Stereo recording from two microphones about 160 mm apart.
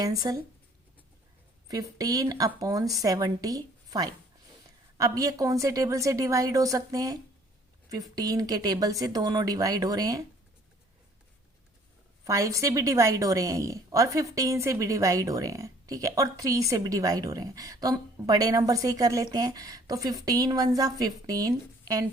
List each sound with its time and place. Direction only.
0.0 s a woman's voice: 20° right (ahead or behind)
1.6 s a woman's voice: 25° right (ahead or behind)
12.2 s a woman's voice: 20° right (ahead or behind)